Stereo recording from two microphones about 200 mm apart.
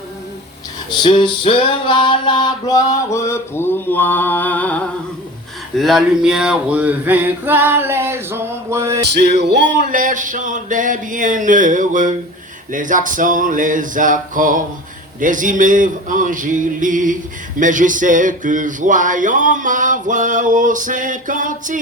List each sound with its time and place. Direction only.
0.9 s music: 25° left (ahead or behind); by 4.9 s 5° left (ahead or behind)
5.7 s male singing: centre (ahead or behind)
9.0 s music: 55° right (ahead or behind)
9.9 s a sound: 40° right (ahead or behind)